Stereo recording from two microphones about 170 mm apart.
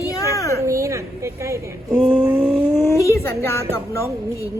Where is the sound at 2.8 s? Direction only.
15° left (ahead or behind).